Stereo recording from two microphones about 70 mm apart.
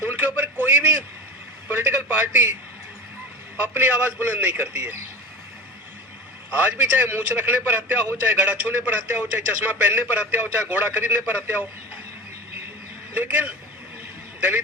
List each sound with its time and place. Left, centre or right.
0.1 s a sound: right
1.7 s a man's voice: right
3.8 s a man's voice: right
6.5 s a man's voice: right
13.1 s a man's voice: right